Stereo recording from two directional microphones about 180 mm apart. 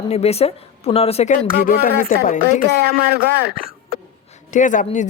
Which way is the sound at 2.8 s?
60° right (ahead or behind).